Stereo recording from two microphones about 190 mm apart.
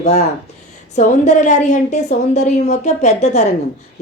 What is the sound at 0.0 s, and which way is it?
Speech, 35° left (ahead or behind).